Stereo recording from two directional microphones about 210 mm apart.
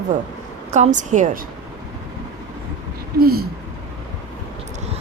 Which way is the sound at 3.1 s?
45° right (ahead or behind).